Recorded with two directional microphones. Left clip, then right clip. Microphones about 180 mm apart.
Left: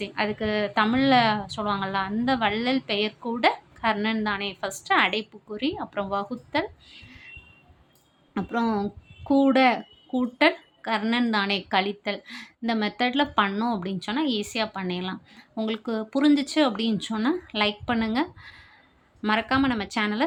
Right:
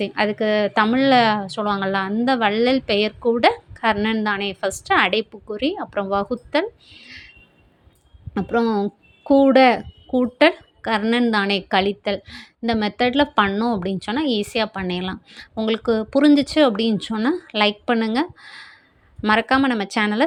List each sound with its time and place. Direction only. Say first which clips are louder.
0.0 s speech: right 7 dB; 35° right (ahead or behind)
6.9 s a sound: right 7 dB; 25° right (ahead or behind)
8.3 s speech: right 6 dB; 25° right (ahead or behind)